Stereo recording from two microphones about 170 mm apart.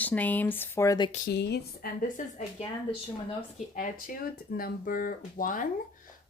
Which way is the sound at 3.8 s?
55° left (ahead or behind).